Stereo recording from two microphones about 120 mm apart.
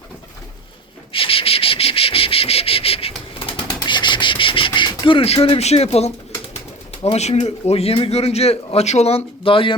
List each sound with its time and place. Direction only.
1.1 s insect: 50° left (ahead or behind)
3.8 s a sound: 40° left (ahead or behind); by 6.1 s 60° left (ahead or behind)
7.0 s a man's voice: 65° left (ahead or behind); by 9.7 s 50° left (ahead or behind)